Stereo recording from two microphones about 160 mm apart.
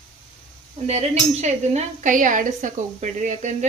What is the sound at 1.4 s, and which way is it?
A woman's voice, 45° right (ahead or behind).